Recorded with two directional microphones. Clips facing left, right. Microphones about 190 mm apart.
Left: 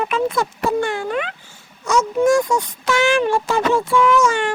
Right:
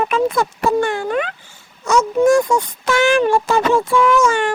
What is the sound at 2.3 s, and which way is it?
Speech, 55° right (ahead or behind).